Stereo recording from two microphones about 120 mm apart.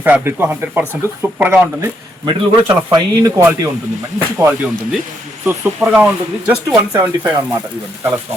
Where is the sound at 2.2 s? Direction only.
40° right (ahead or behind).